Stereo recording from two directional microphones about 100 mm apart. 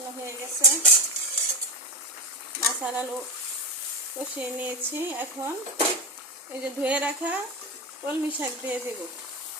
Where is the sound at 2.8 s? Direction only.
15° right (ahead or behind).